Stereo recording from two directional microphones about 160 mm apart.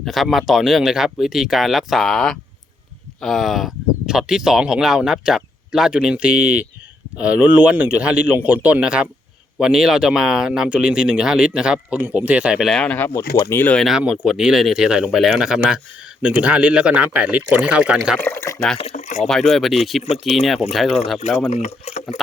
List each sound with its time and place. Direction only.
0.0 s speech: centre (ahead or behind)
13.8 s speech: 5° right (ahead or behind)
18.2 s speech: 15° left (ahead or behind)
18.8 s speech: 45° left (ahead or behind)
19.2 s speech: centre (ahead or behind)
21.5 s speech: 40° left (ahead or behind)